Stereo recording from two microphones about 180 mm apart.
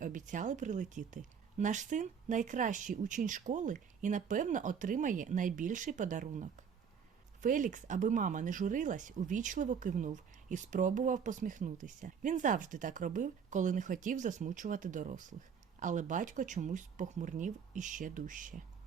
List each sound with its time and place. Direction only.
0.0 s speech: 45° right (ahead or behind)